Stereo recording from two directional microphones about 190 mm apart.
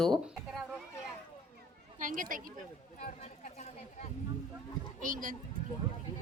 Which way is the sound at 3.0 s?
40° left (ahead or behind).